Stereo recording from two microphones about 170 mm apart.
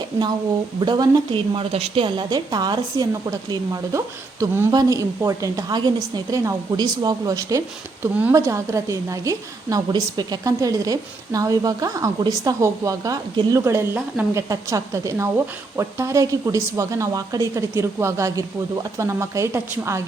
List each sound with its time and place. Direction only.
0.8 s a woman's voice: 25° right (ahead or behind)